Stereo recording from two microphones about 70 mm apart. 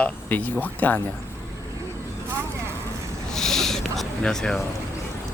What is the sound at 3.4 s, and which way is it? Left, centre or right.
Owl, centre.